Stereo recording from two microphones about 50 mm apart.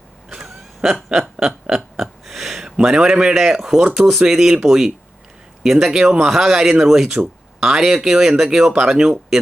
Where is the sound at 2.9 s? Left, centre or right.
Centre.